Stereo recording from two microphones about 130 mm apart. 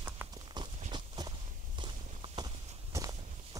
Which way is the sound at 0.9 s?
35° right (ahead or behind).